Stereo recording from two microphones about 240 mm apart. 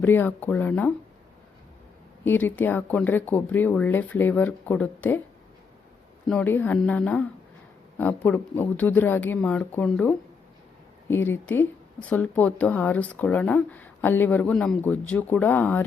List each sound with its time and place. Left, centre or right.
0.0 s speech: centre
2.2 s speech: centre
6.2 s speech: centre